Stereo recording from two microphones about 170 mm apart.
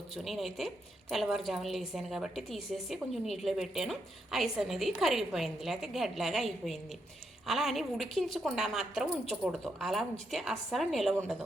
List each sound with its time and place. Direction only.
0.3 s a woman's voice: centre (ahead or behind)